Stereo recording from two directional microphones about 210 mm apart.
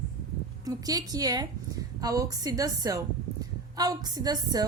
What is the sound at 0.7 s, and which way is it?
Speech, 15° right (ahead or behind).